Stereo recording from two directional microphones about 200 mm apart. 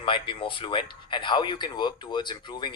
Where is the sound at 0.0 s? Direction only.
25° left (ahead or behind).